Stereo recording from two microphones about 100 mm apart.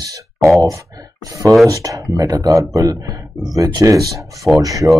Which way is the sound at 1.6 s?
35° right (ahead or behind).